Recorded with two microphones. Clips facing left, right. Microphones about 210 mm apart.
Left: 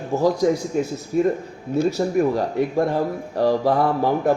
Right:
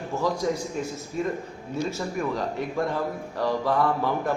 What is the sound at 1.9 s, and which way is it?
Speech, 40° left (ahead or behind).